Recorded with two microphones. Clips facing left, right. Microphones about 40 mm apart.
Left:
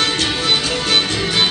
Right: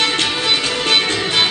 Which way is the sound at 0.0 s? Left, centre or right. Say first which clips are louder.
Right 1 dB; right.